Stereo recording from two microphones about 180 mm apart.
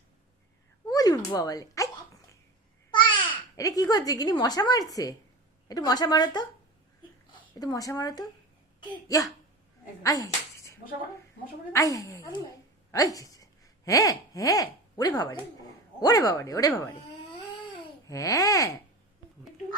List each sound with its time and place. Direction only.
0.9 s a sound: 20° left (ahead or behind)
3.6 s a woman's voice: 20° left (ahead or behind)
7.6 s a woman's voice: 20° left (ahead or behind)
10.0 s a sound: 20° left (ahead or behind)
11.7 s a woman's voice: 20° left (ahead or behind)
18.0 s a woman's voice: 20° left (ahead or behind)